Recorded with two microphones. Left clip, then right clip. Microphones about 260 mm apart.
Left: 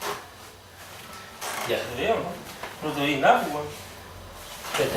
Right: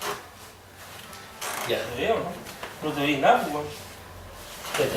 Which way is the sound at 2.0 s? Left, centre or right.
Centre.